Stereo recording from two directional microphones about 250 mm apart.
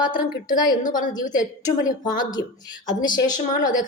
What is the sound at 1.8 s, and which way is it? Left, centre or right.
A woman's voice, centre.